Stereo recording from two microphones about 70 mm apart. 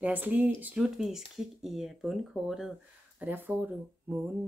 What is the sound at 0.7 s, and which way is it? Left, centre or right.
Speech, centre.